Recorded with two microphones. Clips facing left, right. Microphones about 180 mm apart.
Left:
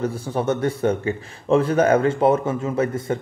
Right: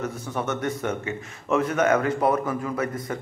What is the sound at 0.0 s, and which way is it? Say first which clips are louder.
Speech: left 6 dB; 30° left (ahead or behind).